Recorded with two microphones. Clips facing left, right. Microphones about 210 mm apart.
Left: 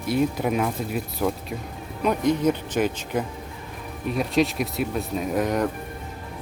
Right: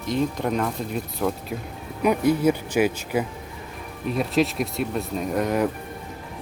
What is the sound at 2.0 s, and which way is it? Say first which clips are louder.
Speech: right 2 dB; 10° right (ahead or behind).